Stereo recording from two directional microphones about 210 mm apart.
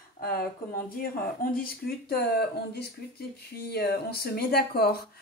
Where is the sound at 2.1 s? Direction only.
50° left (ahead or behind).